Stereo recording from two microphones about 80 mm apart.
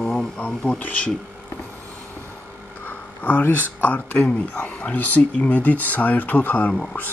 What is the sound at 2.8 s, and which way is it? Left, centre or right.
Speech, left.